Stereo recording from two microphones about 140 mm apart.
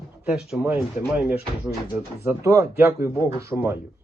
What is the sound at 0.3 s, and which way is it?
Speech, 5° right (ahead or behind).